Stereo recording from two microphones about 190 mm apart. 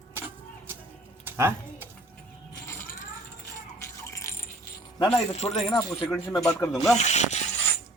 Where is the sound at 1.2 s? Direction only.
10° right (ahead or behind).